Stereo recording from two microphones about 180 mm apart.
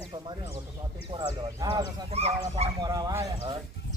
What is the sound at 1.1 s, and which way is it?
Speech, 25° right (ahead or behind).